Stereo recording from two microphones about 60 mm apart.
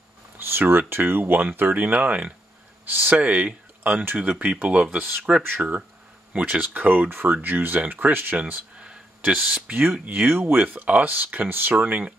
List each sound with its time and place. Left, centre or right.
0.4 s speech: right